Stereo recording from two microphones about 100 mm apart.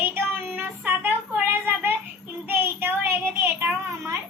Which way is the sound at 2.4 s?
20° right (ahead or behind).